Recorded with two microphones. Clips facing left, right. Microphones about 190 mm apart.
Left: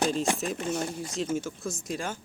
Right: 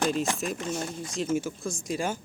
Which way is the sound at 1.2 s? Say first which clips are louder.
Right 3 dB; 5° right (ahead or behind).